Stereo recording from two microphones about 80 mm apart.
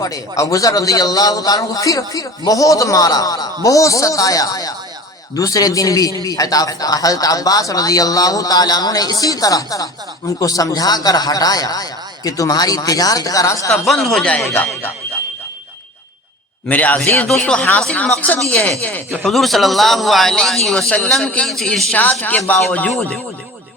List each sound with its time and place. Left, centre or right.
0.0 s speech: left
13.8 s speech: centre
14.5 s speech: left
16.6 s speech: centre
19.2 s speech: centre
21.9 s speech: left